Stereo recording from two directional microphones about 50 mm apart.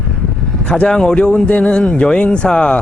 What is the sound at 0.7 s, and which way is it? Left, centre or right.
A man's voice, centre.